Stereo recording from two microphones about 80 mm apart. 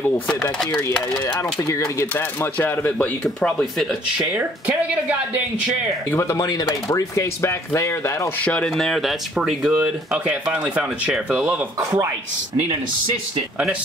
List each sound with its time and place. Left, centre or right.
1.3 s speech: left
2.6 s speech: left
4.4 s speech: centre
6.1 s speech: left
6.4 s speech: left
8.7 s speech: centre
9.8 s speech: centre